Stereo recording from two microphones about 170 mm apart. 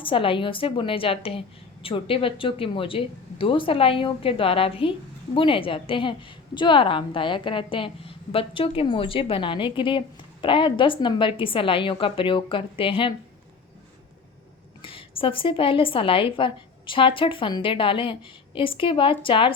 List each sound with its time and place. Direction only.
0.0 s a woman's voice: 30° left (ahead or behind)
14.8 s speech: 30° left (ahead or behind)